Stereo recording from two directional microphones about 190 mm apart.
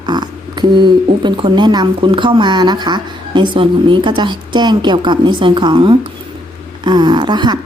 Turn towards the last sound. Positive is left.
turn(degrees=-25)  # may be behind; listen again after turning